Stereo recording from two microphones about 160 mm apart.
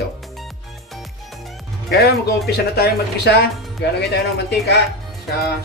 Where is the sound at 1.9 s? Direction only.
80° left.